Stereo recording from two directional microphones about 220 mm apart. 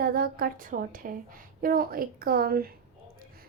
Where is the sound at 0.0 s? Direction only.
40° right (ahead or behind).